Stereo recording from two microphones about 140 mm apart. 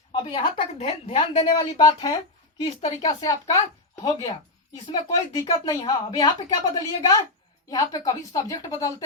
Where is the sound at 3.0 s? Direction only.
25° left (ahead or behind).